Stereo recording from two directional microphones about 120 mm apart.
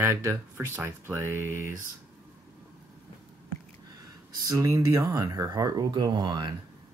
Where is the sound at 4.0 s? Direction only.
25° right (ahead or behind).